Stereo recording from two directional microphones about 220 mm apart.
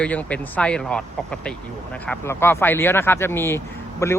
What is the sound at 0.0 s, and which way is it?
Speech, 5° left (ahead or behind).